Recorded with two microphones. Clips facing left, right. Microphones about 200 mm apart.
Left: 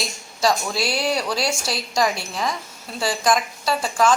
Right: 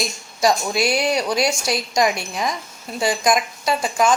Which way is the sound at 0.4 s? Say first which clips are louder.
Right 3 dB; 20° right (ahead or behind).